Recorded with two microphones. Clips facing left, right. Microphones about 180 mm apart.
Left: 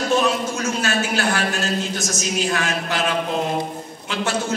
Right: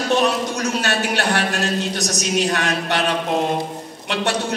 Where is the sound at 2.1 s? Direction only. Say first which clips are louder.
Right 2 dB; 65° right (ahead or behind).